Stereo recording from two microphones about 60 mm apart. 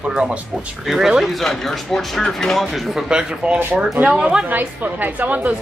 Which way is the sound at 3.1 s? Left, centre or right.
Centre.